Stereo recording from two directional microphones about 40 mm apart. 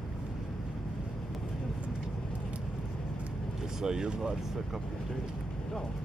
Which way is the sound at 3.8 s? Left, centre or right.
Centre.